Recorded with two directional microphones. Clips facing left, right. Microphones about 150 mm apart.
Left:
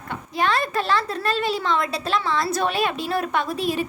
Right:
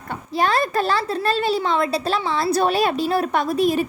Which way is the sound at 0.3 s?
35° right (ahead or behind).